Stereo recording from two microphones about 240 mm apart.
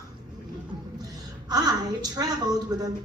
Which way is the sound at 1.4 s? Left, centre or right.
Centre.